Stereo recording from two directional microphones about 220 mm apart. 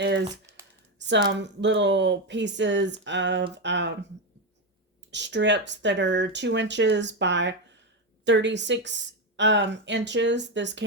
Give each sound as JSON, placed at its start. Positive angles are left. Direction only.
{"t": 0.9, "sound": "a sound", "side_deg": -55}
{"t": 1.4, "sound": "a woman's voice", "side_deg": -55}
{"t": 5.1, "sound": "a woman's voice", "side_deg": -55}